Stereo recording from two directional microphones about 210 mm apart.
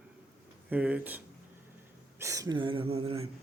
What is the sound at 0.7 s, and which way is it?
Speech, 5° right (ahead or behind).